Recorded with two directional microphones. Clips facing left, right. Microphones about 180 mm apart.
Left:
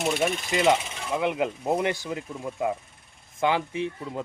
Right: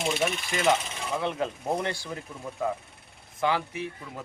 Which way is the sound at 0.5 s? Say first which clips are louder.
Left 4 dB; 15° left (ahead or behind).